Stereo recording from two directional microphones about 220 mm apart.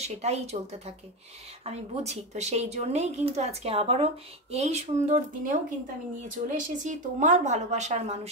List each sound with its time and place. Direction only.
0.0 s a woman's voice: 30° right (ahead or behind)